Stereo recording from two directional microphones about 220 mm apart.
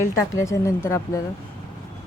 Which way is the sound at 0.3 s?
15° left (ahead or behind).